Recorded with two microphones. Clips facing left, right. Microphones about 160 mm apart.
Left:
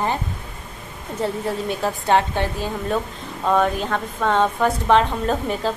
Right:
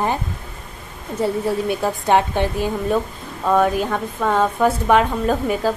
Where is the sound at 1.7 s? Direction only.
15° right (ahead or behind).